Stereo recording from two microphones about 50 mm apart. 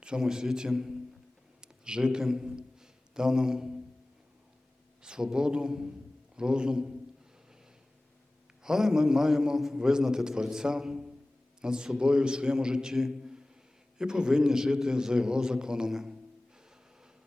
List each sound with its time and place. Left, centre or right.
0.0 s a man's voice: centre
5.0 s a man's voice: centre
8.6 s a man's voice: centre